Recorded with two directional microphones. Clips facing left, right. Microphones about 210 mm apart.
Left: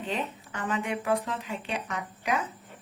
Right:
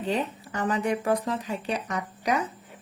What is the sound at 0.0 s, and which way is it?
Speech, 35° right (ahead or behind).